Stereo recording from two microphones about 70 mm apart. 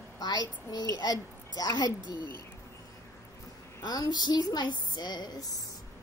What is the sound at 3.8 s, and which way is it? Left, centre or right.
A woman's voice, left.